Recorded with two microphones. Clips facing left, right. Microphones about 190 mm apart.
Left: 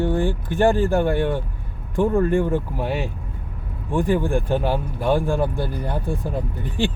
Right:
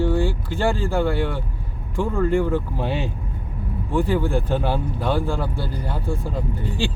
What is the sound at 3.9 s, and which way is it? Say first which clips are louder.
Speech: left 1 dB; 15° left (ahead or behind).